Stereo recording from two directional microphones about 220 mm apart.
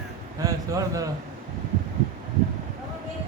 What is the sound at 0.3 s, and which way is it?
Speech, 15° right (ahead or behind).